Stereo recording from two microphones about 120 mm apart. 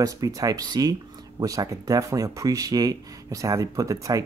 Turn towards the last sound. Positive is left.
turn(degrees=-25)  # may be behind; listen again after turning